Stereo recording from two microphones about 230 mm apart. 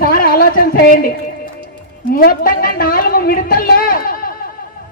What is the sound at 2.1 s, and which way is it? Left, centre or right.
A man's voice, left.